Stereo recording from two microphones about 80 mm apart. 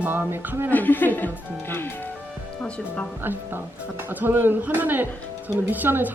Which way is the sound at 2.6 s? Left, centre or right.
Centre.